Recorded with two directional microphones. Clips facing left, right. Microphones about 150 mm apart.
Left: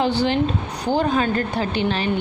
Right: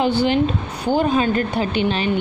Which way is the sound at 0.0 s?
15° right (ahead or behind).